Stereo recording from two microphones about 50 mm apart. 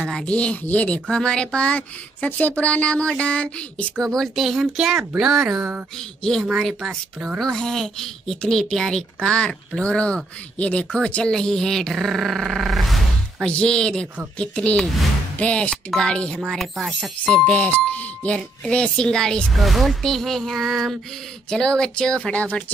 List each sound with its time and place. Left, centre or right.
0.0 s speech: centre
1.1 s speech: centre
4.0 s a woman's voice: centre
4.4 s speech: centre
7.3 s a woman's voice: centre
11.9 s speech: centre
13.5 s a woman's voice: centre
16.4 s speech: centre
17.0 s speech: left
19.5 s speech: centre
21.5 s a woman's voice: centre